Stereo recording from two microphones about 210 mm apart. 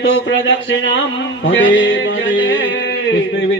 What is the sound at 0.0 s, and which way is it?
Speech, 60° left (ahead or behind).